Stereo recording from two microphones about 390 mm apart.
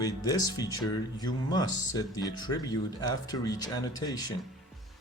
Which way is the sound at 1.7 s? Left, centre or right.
Left.